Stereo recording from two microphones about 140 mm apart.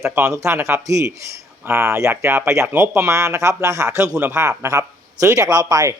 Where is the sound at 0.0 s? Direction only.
20° right (ahead or behind).